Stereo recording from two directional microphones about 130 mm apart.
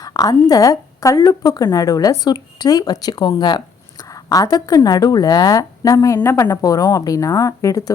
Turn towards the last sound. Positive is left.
turn(degrees=25)  # may be behind; listen again after turning